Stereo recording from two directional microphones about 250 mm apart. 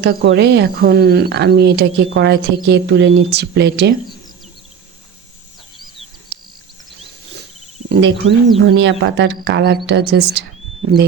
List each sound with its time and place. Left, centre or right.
0.0 s speech: right
7.9 s speech: right